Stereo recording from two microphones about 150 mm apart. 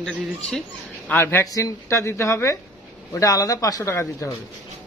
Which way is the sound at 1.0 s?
15° left (ahead or behind).